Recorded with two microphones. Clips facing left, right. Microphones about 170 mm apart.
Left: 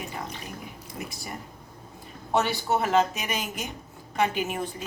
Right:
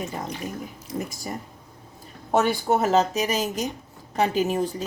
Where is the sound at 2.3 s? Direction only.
50° right (ahead or behind).